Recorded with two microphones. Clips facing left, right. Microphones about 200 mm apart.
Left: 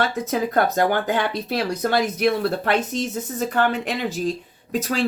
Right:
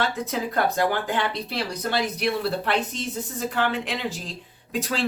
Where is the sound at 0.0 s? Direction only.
45° left (ahead or behind).